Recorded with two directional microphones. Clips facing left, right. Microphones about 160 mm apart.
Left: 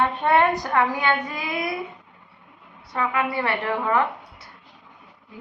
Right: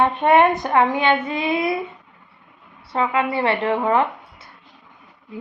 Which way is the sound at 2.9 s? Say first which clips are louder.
Right 4 dB; 25° right (ahead or behind).